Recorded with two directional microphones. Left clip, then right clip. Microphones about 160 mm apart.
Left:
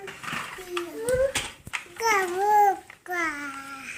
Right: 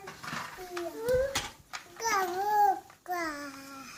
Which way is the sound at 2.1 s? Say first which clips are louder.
Left 7 dB; 65° right (ahead or behind).